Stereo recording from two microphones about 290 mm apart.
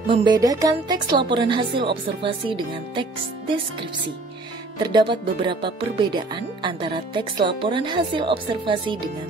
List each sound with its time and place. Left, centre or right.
0.1 s speech: centre
4.9 s speech: centre